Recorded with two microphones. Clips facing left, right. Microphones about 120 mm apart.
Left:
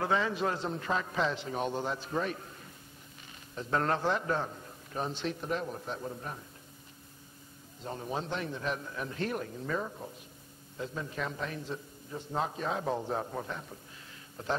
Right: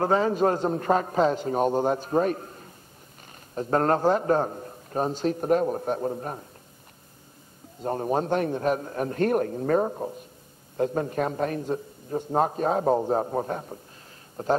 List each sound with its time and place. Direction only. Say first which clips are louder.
0.0 s a man's voice: right 8 dB; 40° right (ahead or behind)
7.8 s a man's voice: right 11 dB; 50° right (ahead or behind)